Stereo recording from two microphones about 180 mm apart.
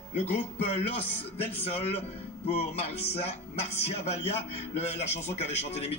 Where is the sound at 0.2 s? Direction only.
35° left (ahead or behind).